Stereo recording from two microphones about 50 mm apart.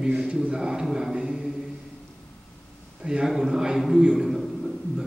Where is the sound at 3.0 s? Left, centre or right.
Centre.